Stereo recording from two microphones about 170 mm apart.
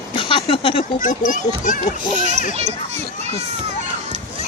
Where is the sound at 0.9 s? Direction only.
50° left (ahead or behind).